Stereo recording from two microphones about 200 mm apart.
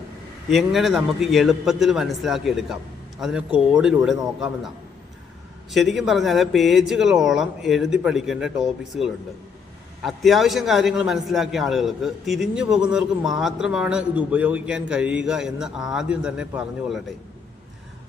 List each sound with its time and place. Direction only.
0.5 s a man's voice: centre (ahead or behind)
5.7 s a man's voice: centre (ahead or behind)